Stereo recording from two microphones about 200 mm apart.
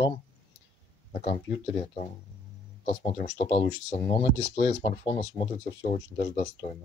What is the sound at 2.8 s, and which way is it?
Speech, 30° left (ahead or behind).